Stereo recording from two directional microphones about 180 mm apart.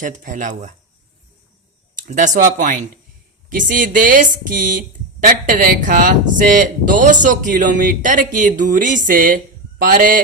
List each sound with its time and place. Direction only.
0.0 s speech: 45° right (ahead or behind)
2.0 s speech: 45° right (ahead or behind)